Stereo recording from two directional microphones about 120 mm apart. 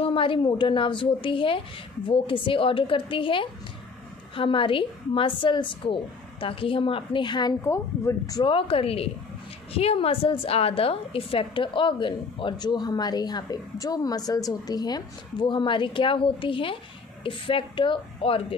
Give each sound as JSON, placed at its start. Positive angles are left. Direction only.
{"t": 0.0, "sound": "a woman's voice", "side_deg": 45}
{"t": 7.6, "sound": "speech", "side_deg": 25}
{"t": 8.5, "sound": "a woman's voice", "side_deg": 50}